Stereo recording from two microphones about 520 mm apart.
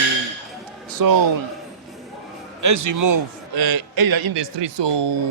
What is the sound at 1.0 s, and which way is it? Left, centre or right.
Speech, right.